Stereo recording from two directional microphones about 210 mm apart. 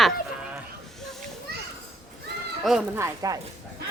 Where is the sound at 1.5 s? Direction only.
50° right (ahead or behind).